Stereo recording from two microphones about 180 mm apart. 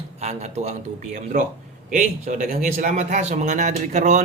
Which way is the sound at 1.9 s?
45° right (ahead or behind).